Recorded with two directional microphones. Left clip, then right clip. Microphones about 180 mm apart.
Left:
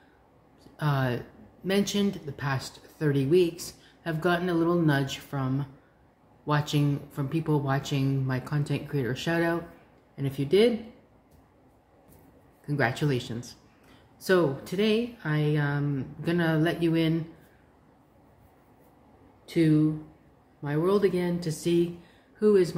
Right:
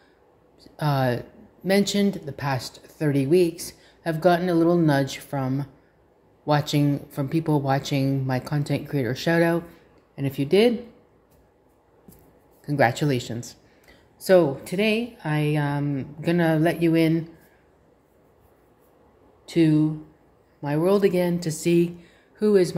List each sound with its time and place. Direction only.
0.7 s speech: 35° right (ahead or behind)
12.6 s speech: 35° right (ahead or behind)
19.4 s speech: 40° right (ahead or behind)